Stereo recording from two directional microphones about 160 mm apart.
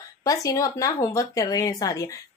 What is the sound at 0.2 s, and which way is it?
Speech, 20° left (ahead or behind).